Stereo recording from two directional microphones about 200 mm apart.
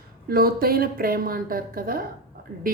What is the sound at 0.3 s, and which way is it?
Speech, 45° right (ahead or behind).